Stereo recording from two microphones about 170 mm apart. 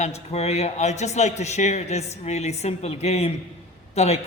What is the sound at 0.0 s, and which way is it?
A man's voice, 40° left (ahead or behind).